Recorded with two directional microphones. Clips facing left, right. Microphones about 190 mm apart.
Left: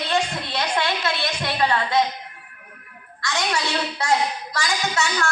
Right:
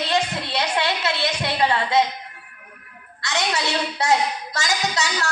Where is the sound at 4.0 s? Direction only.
20° right (ahead or behind).